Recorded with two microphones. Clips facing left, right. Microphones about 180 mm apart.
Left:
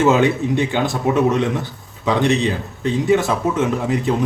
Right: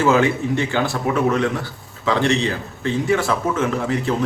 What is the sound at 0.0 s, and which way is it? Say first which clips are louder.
A man's voice: left 2 dB; 20° left (ahead or behind).